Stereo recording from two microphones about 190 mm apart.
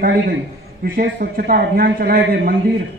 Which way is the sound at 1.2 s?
50° right (ahead or behind).